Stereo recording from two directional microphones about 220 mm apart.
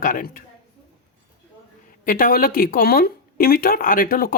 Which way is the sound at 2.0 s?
40° left (ahead or behind).